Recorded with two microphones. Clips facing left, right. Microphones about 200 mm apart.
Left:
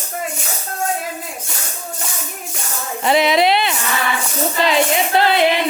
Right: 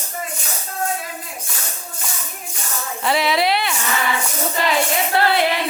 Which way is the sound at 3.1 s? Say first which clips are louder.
Left 4 dB; 20° left (ahead or behind).